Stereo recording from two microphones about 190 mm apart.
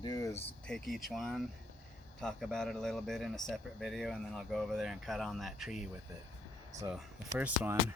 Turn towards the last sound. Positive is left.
turn(degrees=-10)  # may be behind; listen again after turning